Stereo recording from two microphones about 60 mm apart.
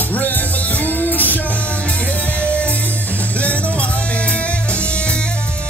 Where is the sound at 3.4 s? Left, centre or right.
Left.